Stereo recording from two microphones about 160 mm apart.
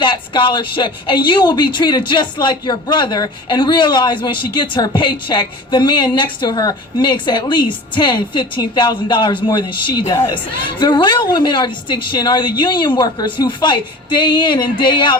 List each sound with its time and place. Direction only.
0.0 s a woman's voice: 30° left (ahead or behind)